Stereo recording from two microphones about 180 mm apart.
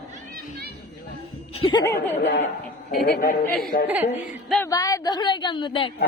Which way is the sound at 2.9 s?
55° left (ahead or behind).